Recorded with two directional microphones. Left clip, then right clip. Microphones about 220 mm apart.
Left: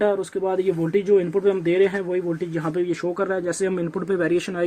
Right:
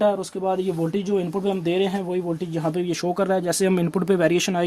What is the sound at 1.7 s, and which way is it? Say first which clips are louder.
Speech: left 1 dB; 55° right (ahead or behind).